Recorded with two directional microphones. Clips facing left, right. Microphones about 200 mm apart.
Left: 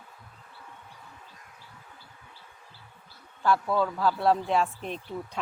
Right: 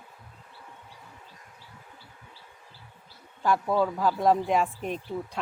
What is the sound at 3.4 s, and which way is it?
A man's voice, 15° right (ahead or behind).